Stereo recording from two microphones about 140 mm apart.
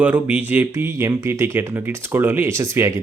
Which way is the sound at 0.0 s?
10° right (ahead or behind).